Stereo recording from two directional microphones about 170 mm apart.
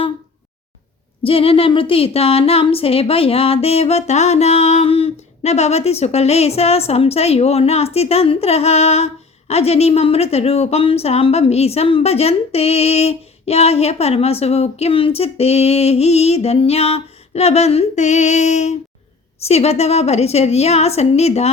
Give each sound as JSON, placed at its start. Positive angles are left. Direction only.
{"t": 1.2, "sound": "a woman's voice", "side_deg": 35}